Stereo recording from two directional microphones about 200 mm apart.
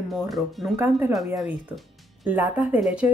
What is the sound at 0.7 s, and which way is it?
Speech, 10° right (ahead or behind).